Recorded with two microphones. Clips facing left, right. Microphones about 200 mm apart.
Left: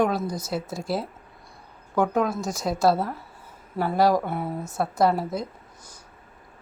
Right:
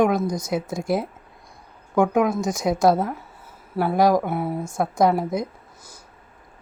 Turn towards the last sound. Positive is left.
turn(degrees=-15)  # may be behind; listen again after turning